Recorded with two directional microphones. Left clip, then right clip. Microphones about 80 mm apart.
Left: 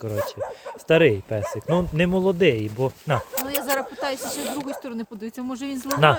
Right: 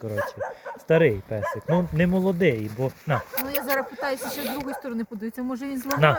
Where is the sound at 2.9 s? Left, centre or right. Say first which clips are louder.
Left 1 dB; left.